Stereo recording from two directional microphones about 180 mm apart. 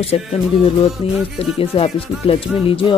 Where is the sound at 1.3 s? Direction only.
30° left (ahead or behind).